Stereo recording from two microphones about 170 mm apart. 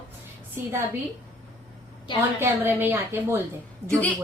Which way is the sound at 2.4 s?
10° right (ahead or behind).